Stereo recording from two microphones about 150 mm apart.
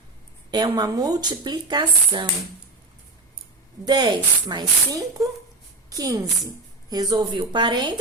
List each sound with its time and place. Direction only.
0.5 s speech: 25° right (ahead or behind)
3.8 s speech: 30° right (ahead or behind)